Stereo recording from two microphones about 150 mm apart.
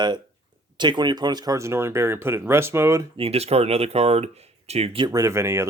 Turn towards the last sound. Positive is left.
turn(degrees=-15)  # may be behind; listen again after turning